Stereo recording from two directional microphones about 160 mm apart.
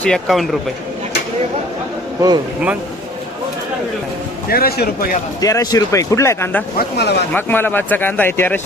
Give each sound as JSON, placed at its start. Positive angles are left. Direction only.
{"t": 0.0, "sound": "a man's voice", "side_deg": 0}
{"t": 4.4, "sound": "a man's voice", "side_deg": 70}
{"t": 5.4, "sound": "speech", "side_deg": 20}
{"t": 6.7, "sound": "speech", "side_deg": 90}
{"t": 7.3, "sound": "speech", "side_deg": 15}